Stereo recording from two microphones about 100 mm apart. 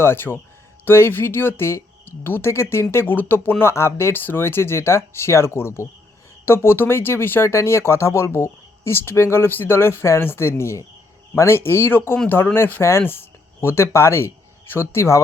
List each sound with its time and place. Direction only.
0.0 s speech: 20° left (ahead or behind)